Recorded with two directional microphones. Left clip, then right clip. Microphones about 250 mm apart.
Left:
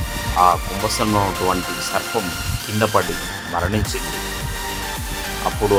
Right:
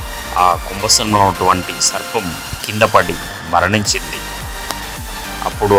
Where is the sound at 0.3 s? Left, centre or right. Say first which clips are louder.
Right 2 dB; right.